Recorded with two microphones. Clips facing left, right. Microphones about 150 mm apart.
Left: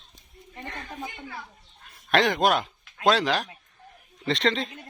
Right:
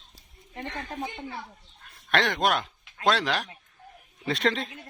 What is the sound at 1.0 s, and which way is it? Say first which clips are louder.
Speech: right 3 dB; 25° right (ahead or behind).